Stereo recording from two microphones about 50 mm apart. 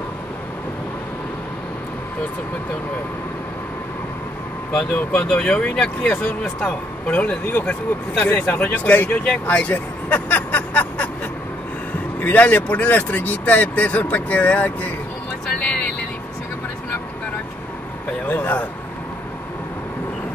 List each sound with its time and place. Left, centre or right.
4.7 s speech: left
7.4 s speech: left
12.2 s speech: left
15.6 s vehicle: left
18.3 s speech: left